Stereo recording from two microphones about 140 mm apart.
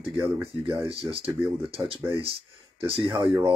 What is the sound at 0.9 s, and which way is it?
Speech, 45° right (ahead or behind).